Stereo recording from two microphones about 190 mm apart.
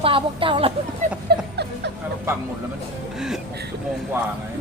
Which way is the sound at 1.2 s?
60° right (ahead or behind).